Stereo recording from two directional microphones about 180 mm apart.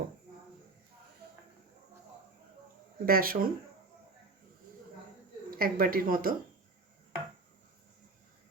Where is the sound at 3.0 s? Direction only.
55° right (ahead or behind).